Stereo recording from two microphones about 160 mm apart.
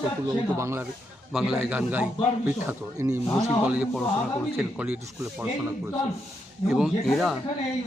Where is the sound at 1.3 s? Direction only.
5° right (ahead or behind).